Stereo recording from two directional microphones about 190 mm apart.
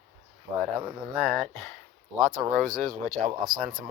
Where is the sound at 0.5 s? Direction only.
5° right (ahead or behind).